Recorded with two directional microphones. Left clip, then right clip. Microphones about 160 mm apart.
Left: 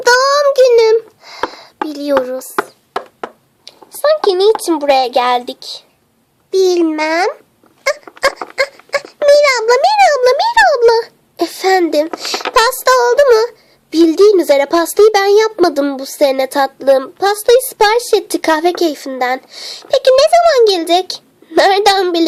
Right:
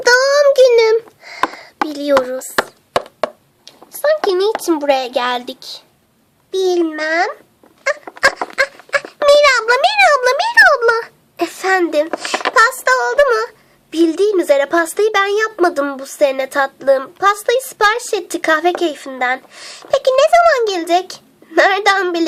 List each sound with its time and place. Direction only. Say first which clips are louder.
0.0 s child singing: left 1 dB; 5° left (ahead or behind)
1.9 s a sound: even; 5° left (ahead or behind)
3.7 s a sound: left 3 dB; 10° left (ahead or behind)
6.5 s a child's voice: left 4 dB; 25° left (ahead or behind)
7.9 s dog: even; 20° left (ahead or behind)
12.5 s a child's voice: left 2 dB; 20° left (ahead or behind)